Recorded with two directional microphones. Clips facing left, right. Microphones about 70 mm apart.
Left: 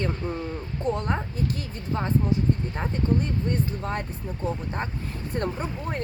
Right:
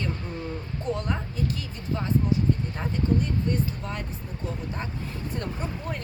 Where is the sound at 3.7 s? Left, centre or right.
Left.